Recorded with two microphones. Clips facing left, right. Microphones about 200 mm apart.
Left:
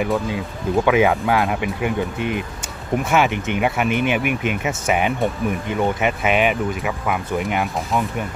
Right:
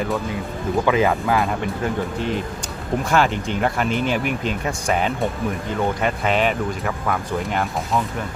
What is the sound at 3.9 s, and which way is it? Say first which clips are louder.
Speech: left 2 dB; 20° left (ahead or behind).